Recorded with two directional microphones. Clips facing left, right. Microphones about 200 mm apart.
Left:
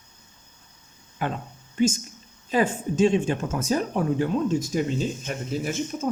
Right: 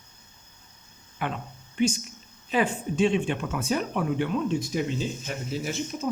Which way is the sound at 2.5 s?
40° left (ahead or behind).